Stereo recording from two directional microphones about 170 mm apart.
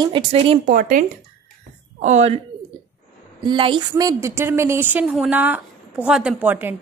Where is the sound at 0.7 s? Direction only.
50° right (ahead or behind).